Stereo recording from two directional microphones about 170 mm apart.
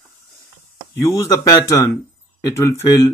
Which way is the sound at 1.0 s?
15° left (ahead or behind).